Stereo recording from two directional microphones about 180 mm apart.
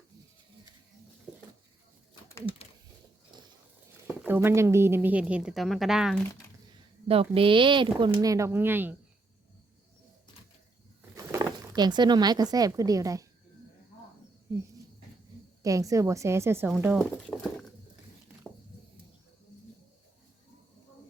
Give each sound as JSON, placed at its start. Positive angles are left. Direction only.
{"t": 3.3, "sound": "wild animals", "side_deg": -25}
{"t": 4.0, "sound": "speech", "side_deg": -10}
{"t": 7.1, "sound": "speech", "side_deg": -30}
{"t": 11.1, "sound": "speech", "side_deg": -15}
{"t": 15.6, "sound": "speech", "side_deg": -20}
{"t": 17.2, "sound": "a sound", "side_deg": 5}